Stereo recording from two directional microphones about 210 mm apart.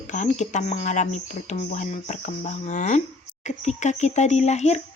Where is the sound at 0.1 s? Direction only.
35° left (ahead or behind).